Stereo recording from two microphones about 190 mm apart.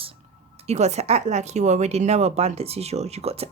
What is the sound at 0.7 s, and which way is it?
Speech, 35° right (ahead or behind).